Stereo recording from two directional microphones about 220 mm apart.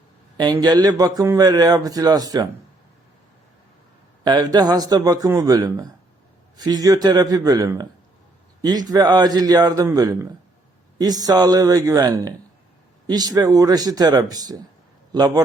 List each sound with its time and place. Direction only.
0.3 s a man's voice: 20° right (ahead or behind)
4.2 s a man's voice: 20° right (ahead or behind)